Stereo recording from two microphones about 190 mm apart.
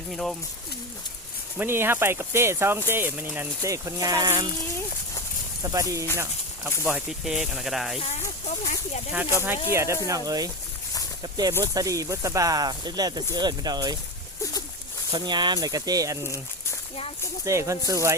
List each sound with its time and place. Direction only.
0.1 s speech: centre (ahead or behind)
1.5 s speech: 10° right (ahead or behind)
5.6 s speech: 15° right (ahead or behind)
6.8 s speech: 5° right (ahead or behind)
7.9 s speech: 35° left (ahead or behind)
9.1 s speech: 10° right (ahead or behind)
15.1 s speech: 25° right (ahead or behind)
17.4 s speech: 15° right (ahead or behind)